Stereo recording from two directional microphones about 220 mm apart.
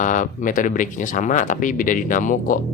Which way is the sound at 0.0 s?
35° left (ahead or behind).